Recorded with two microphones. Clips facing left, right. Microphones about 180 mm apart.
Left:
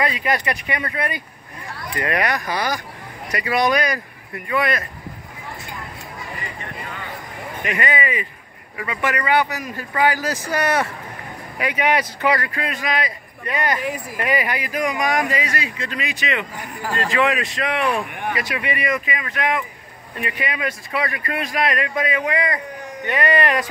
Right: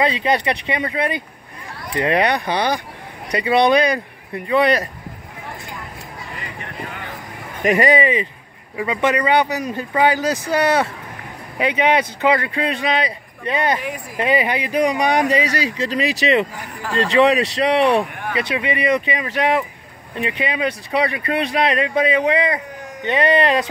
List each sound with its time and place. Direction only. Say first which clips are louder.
0.0 s speech: right 4 dB; 25° right (ahead or behind)
7.6 s speech: right 8 dB; 40° right (ahead or behind); by 10.4 s 20° right (ahead or behind)
11.5 s speech: right 3 dB; 25° right (ahead or behind)
18.5 s speech: right 8 dB; 20° right (ahead or behind)